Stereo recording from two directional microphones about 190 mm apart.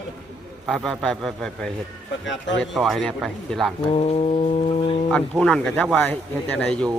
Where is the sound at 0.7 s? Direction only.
Centre (ahead or behind).